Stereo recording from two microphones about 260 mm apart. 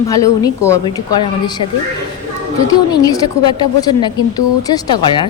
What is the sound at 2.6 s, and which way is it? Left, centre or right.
Speech, centre.